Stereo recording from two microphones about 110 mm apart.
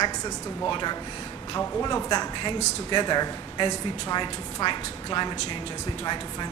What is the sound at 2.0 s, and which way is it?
A man's voice, 40° left (ahead or behind).